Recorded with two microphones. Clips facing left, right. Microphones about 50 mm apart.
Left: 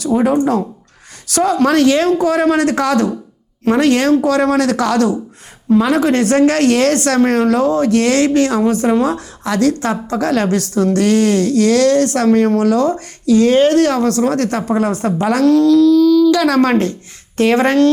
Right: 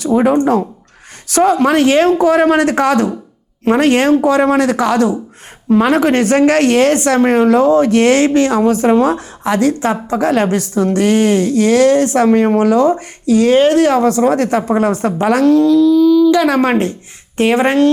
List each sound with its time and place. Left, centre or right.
0.0 s a woman's voice: right
5.7 s a woman's voice: right; by 17.9 s centre